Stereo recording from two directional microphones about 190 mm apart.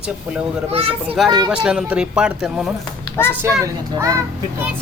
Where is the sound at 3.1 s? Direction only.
10° left (ahead or behind).